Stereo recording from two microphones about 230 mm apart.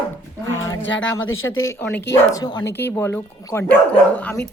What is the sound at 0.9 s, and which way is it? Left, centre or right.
Speech, left.